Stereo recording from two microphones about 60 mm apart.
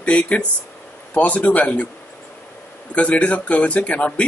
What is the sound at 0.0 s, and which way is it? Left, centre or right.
Speech, left.